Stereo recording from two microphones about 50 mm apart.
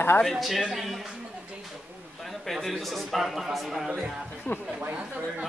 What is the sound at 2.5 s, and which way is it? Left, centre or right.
A man's voice, centre.